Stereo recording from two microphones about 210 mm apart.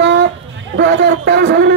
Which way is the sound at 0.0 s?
55° right (ahead or behind).